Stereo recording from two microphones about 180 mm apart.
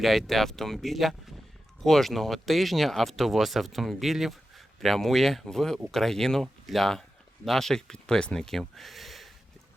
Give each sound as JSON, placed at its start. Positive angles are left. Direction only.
{"t": 0.0, "sound": "speech", "side_deg": 0}